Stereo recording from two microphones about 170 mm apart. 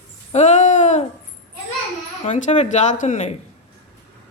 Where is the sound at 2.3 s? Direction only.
45° left (ahead or behind).